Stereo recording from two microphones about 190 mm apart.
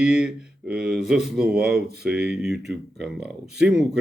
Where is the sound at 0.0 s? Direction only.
5° right (ahead or behind).